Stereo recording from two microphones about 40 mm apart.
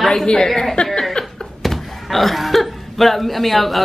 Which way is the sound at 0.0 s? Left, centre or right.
Centre.